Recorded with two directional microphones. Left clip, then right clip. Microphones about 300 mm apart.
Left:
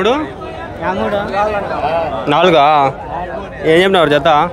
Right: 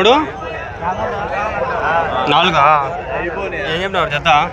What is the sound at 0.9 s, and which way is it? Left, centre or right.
Speech, left.